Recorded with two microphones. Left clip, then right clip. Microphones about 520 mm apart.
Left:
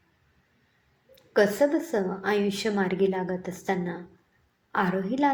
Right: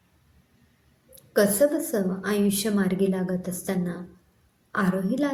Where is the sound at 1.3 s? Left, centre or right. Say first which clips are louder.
Right 1 dB; right.